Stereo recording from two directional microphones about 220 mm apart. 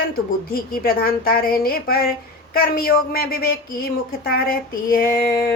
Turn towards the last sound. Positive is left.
turn(degrees=40)  # may be behind; listen again after turning